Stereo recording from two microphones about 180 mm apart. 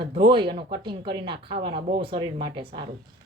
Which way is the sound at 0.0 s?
25° right (ahead or behind).